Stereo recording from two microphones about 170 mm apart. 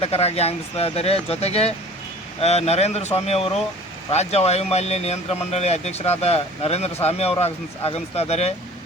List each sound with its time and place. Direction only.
0.0 s speech: 35° left (ahead or behind)